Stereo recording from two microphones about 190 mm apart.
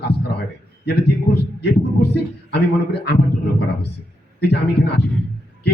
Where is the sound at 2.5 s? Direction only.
60° left (ahead or behind).